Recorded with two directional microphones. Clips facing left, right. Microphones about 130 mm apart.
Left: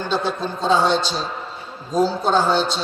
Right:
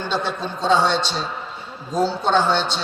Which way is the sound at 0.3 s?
10° left (ahead or behind).